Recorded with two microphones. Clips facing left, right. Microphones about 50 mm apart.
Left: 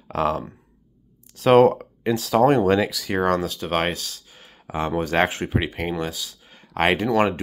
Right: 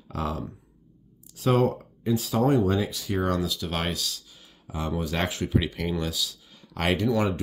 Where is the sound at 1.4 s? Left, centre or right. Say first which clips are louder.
Left 9 dB; left.